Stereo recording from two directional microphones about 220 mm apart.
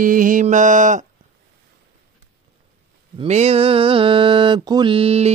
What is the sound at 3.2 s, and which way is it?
Mantra, 30° right (ahead or behind).